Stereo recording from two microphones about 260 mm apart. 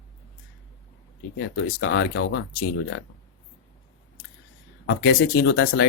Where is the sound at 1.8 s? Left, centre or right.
Left.